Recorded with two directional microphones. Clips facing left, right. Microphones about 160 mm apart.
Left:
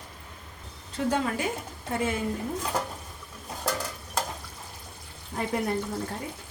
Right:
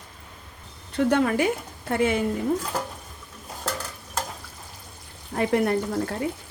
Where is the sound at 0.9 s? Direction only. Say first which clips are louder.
Right 6 dB; 65° right (ahead or behind).